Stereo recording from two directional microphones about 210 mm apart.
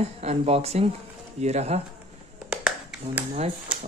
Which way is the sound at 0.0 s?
30° right (ahead or behind).